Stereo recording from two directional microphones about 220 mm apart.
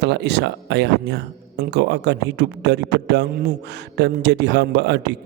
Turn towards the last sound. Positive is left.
turn(degrees=-50)  # may be behind; listen again after turning